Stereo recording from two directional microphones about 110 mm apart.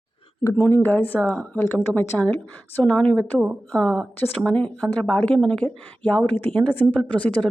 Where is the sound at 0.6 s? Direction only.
15° left (ahead or behind).